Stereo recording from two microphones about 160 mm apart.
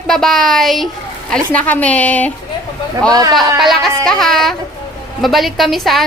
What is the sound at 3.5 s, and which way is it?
Speech, centre (ahead or behind).